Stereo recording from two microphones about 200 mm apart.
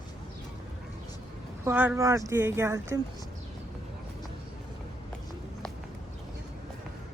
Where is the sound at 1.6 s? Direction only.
10° right (ahead or behind).